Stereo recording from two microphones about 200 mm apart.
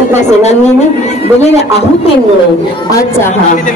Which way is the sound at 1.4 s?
30° left (ahead or behind).